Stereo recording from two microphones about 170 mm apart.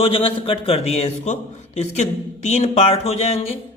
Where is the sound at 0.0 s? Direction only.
30° left (ahead or behind).